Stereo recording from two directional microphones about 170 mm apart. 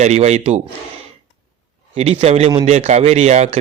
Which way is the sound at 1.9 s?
35° right (ahead or behind).